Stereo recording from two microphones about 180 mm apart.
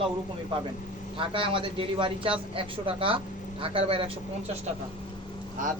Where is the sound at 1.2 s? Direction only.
30° right (ahead or behind).